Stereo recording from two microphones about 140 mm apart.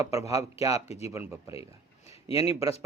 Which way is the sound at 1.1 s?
20° right (ahead or behind).